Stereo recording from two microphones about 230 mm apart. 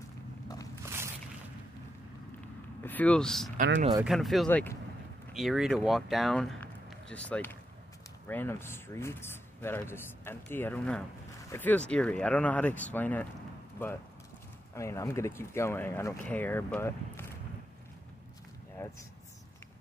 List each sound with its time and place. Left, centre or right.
0.8 s a sound: centre
2.8 s speech: centre
3.5 s speech: right
4.0 s speech: centre
18.8 s speech: centre